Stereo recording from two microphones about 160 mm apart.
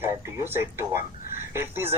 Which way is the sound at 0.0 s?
15° right (ahead or behind).